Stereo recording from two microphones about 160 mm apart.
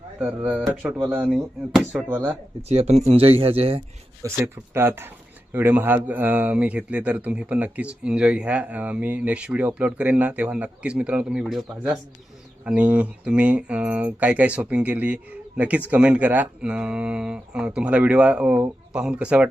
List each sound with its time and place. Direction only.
0.2 s speech: 5° right (ahead or behind)
2.6 s speech: 40° right (ahead or behind)
4.2 s speech: 15° right (ahead or behind)